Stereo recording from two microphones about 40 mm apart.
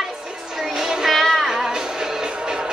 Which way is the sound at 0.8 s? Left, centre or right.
Centre.